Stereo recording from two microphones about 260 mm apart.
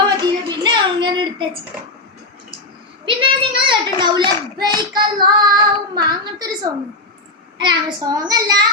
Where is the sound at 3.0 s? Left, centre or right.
Centre.